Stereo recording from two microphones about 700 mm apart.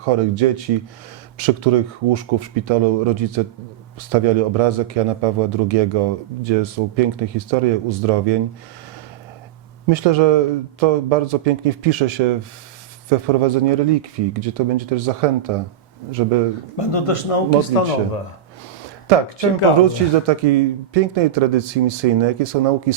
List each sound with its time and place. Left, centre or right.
0.0 s a man's voice: right
9.8 s a man's voice: right
16.7 s speech: left
19.0 s speech: right